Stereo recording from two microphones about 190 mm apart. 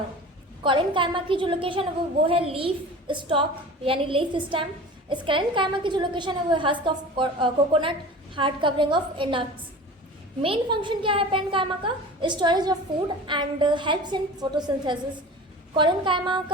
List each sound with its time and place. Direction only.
0.6 s a woman's voice: 25° right (ahead or behind)
10.4 s a woman's voice: 25° right (ahead or behind)